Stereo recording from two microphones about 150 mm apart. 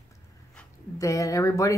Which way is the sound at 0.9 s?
20° left (ahead or behind).